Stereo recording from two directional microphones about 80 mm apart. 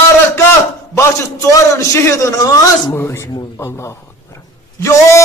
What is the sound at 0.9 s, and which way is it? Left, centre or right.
A man's voice, left.